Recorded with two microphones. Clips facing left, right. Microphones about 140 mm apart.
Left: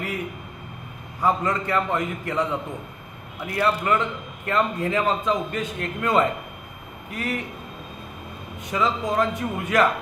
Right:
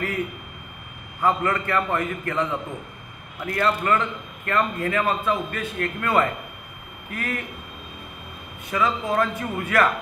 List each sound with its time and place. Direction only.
1.2 s a man's voice: 15° left (ahead or behind)
3.4 s a man's voice: 15° left (ahead or behind)
8.6 s a man's voice: 15° left (ahead or behind)